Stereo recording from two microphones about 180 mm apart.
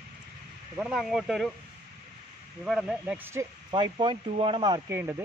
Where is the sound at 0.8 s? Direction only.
5° right (ahead or behind).